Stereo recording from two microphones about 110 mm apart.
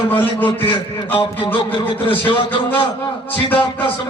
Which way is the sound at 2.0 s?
50° left (ahead or behind).